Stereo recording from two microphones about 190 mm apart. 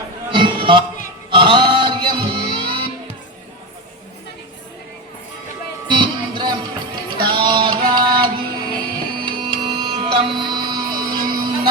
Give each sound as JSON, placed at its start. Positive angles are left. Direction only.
{"t": 0.3, "sound": "a sound", "side_deg": -25}
{"t": 1.3, "sound": "music", "side_deg": -25}
{"t": 5.9, "sound": "music", "side_deg": -25}